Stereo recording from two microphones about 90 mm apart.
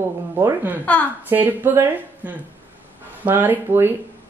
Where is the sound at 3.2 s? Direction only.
20° right (ahead or behind).